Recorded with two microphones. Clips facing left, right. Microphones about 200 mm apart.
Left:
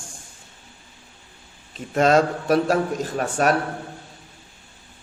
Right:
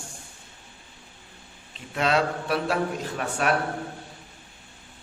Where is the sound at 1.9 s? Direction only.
45° left (ahead or behind).